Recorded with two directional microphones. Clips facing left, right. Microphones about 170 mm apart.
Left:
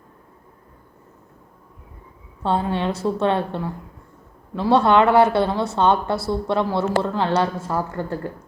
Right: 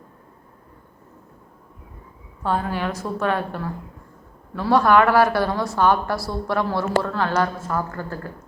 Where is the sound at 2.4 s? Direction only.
25° left (ahead or behind).